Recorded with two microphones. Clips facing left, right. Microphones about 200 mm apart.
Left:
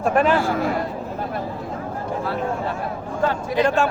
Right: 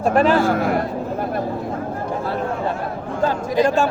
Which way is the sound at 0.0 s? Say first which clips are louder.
Right 2 dB; 35° right (ahead or behind).